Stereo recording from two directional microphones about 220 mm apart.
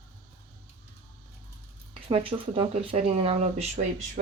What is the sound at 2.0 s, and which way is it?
A woman's voice, 25° right (ahead or behind).